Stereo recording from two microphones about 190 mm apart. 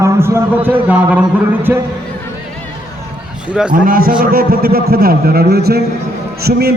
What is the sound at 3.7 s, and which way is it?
A man's voice, 50° right (ahead or behind).